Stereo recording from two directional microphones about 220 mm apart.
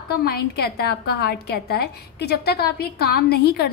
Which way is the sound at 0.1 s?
45° left (ahead or behind).